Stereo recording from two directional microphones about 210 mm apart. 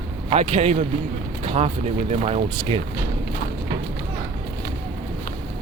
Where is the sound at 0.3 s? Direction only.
30° right (ahead or behind).